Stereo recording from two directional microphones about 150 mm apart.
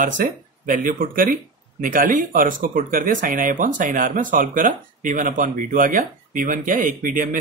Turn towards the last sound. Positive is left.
turn(degrees=-65)  # may be behind; listen again after turning